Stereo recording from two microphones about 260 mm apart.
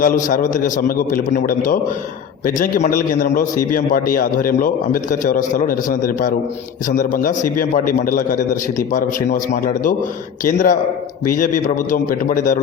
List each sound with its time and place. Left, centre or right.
0.0 s a man's voice: left